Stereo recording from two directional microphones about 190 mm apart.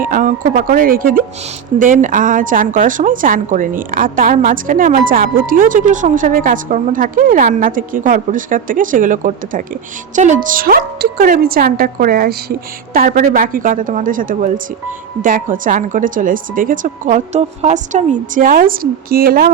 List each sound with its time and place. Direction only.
0.0 s a woman's voice: 45° right (ahead or behind)